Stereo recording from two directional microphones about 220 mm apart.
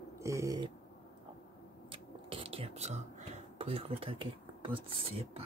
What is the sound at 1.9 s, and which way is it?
Speech, 25° right (ahead or behind).